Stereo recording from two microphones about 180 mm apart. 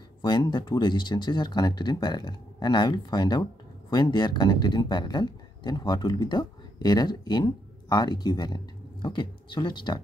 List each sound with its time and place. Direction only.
0.2 s speech: 25° left (ahead or behind)